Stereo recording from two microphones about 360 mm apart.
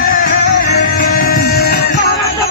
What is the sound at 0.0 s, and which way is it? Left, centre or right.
Music, left.